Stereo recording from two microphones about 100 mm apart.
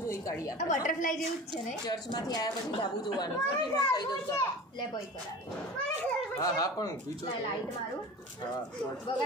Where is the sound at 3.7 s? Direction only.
40° left (ahead or behind).